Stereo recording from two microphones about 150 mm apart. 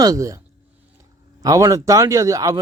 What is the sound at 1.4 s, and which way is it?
Speech, 20° right (ahead or behind).